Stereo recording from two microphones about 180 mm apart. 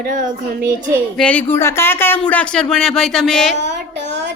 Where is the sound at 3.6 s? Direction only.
75° right (ahead or behind).